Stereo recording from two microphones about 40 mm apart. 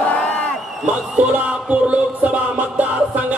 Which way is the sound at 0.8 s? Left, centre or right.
Right.